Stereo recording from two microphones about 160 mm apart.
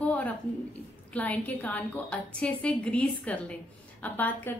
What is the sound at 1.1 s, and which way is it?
A woman's voice, 10° left (ahead or behind).